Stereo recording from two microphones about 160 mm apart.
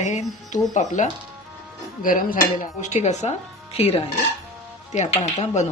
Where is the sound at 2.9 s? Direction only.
45° left (ahead or behind).